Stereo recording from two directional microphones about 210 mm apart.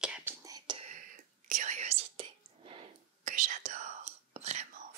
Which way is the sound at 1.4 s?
35° right (ahead or behind).